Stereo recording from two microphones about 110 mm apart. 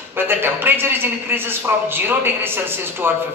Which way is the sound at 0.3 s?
20° right (ahead or behind).